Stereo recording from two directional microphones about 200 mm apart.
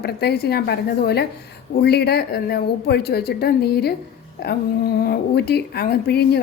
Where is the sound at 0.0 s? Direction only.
55° left (ahead or behind).